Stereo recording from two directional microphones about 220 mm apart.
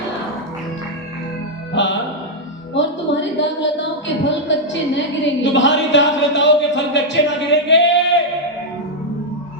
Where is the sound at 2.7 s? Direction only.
55° left (ahead or behind).